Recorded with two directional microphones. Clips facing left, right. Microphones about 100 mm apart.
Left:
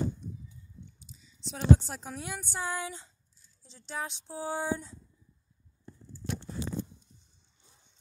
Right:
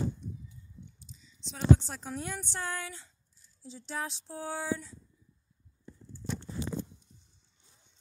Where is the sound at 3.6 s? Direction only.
5° right (ahead or behind).